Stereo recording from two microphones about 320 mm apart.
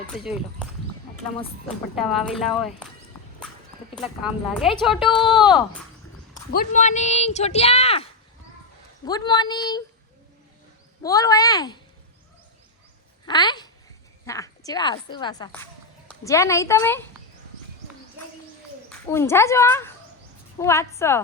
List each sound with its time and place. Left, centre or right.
0.1 s a woman's voice: centre
2.0 s a woman's voice: centre
4.2 s a woman's voice: centre
6.3 s a woman's voice: left
9.0 s a woman's voice: centre
11.0 s a woman's voice: centre
13.2 s a woman's voice: centre
18.9 s a woman's voice: centre